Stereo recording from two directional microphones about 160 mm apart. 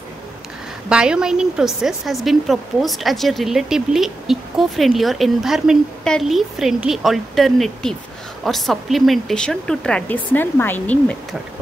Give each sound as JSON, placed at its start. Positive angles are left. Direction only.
{"t": 0.8, "sound": "speech", "side_deg": -5}